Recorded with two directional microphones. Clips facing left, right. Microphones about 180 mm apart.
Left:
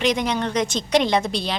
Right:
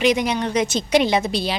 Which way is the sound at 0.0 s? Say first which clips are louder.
Right 2 dB; 10° right (ahead or behind).